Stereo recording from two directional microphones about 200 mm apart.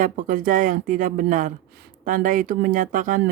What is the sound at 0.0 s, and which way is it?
Speech, 40° right (ahead or behind).